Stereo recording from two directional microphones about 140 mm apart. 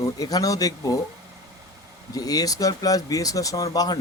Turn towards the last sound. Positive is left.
turn(degrees=25)  # may be behind; listen again after turning